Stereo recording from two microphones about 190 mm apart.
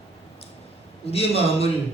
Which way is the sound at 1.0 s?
30° left (ahead or behind).